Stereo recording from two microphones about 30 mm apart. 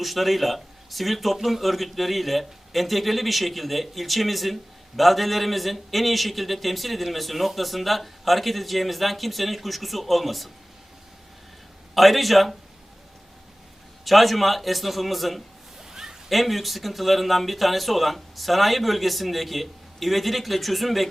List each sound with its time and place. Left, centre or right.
0.0 s a man's voice: centre
11.9 s a man's voice: centre
14.0 s a man's voice: centre
15.8 s a sound: centre
16.3 s a man's voice: centre